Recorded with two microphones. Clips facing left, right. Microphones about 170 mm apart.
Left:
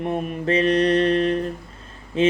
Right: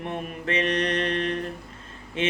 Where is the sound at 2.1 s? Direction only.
35° left (ahead or behind).